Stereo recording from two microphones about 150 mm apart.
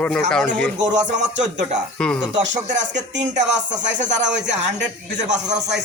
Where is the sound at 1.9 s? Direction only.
5° left (ahead or behind).